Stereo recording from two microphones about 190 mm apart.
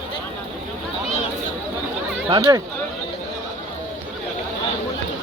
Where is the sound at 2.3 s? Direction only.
20° right (ahead or behind).